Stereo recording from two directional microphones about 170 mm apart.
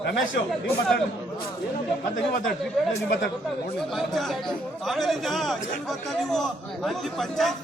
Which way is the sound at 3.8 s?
Centre (ahead or behind).